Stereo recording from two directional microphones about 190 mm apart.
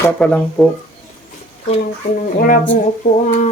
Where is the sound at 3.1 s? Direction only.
45° left (ahead or behind).